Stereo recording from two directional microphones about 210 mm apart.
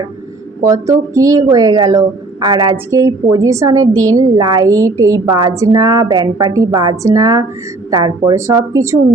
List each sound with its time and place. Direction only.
0.6 s speech: 15° right (ahead or behind)